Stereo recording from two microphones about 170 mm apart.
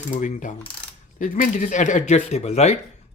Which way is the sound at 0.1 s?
45° left (ahead or behind).